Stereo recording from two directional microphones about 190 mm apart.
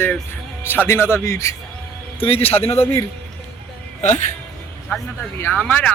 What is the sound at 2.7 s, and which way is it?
Speech, 10° left (ahead or behind).